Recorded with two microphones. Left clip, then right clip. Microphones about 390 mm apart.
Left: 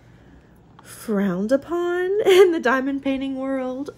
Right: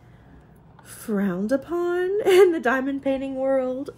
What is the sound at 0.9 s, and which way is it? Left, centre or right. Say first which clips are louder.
A woman's voice: left 3 dB; left.